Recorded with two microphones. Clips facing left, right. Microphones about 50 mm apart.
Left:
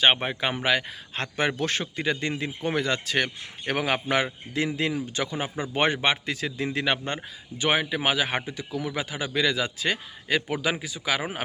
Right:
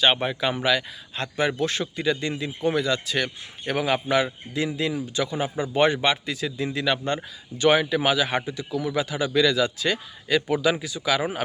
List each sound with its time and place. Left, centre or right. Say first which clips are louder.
0.0 s a man's voice: right 1 dB; left
7.2 s a man's voice: right 6 dB; centre